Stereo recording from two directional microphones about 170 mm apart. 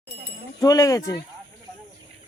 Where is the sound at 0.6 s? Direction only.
20° left (ahead or behind).